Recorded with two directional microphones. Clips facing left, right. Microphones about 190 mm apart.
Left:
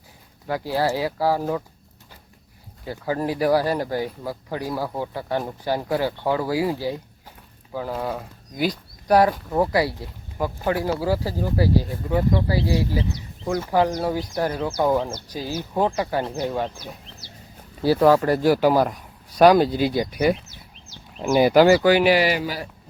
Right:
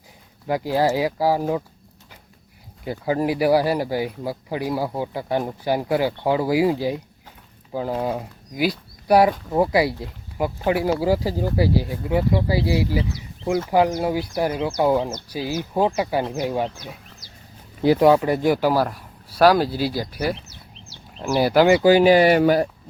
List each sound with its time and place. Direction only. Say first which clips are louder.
0.4 s speech: right 3 dB; 15° right (ahead or behind)
2.8 s speech: right 3 dB; 15° right (ahead or behind)
17.8 s speech: right 1 dB; 15° right (ahead or behind)
18.4 s speech: left 3 dB; 5° left (ahead or behind)
18.7 s speech: left 1 dB; 15° left (ahead or behind)
18.9 s speech: left 2 dB; 5° right (ahead or behind)
21.2 s speech: left 2 dB; 10° left (ahead or behind)
21.9 s speech: right 4 dB; 40° right (ahead or behind)